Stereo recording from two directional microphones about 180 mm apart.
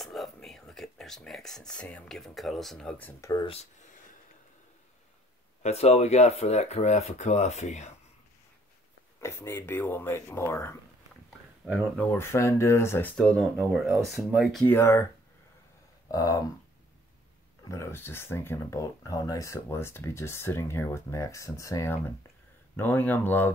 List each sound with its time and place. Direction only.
0.0 s speech: centre (ahead or behind); by 3.4 s 15° left (ahead or behind)
5.6 s speech: 35° left (ahead or behind)
9.2 s speech: 15° left (ahead or behind)
12.1 s speech: 15° left (ahead or behind)
13.4 s speech: centre (ahead or behind)
14.7 s speech: 15° left (ahead or behind)
16.1 s speech: 20° left (ahead or behind)
17.6 s speech: 15° left (ahead or behind)